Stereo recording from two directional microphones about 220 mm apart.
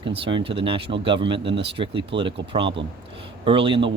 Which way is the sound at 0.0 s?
20° right (ahead or behind).